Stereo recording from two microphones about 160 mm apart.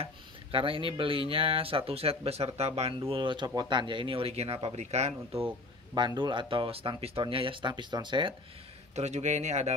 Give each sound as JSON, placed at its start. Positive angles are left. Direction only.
{"t": 0.0, "sound": "speech", "side_deg": -35}
{"t": 5.9, "sound": "speech", "side_deg": -30}
{"t": 8.9, "sound": "speech", "side_deg": -45}